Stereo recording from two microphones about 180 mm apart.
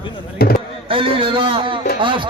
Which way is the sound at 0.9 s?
30° right (ahead or behind).